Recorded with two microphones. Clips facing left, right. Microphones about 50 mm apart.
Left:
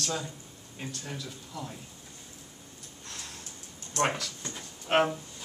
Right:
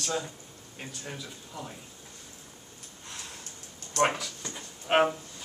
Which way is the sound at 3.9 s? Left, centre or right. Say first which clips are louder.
Right 2 dB; centre.